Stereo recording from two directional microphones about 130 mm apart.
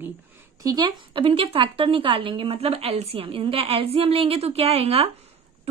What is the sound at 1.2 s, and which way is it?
A woman's voice, 45° right (ahead or behind).